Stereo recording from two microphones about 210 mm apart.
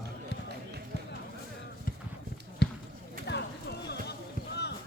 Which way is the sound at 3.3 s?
50° left (ahead or behind).